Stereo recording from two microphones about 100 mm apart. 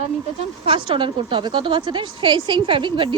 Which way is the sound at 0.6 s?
60° right (ahead or behind).